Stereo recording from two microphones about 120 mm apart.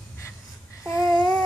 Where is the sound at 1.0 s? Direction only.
5° left (ahead or behind).